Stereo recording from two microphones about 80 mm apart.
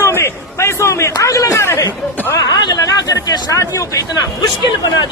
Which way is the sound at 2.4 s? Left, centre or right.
Left.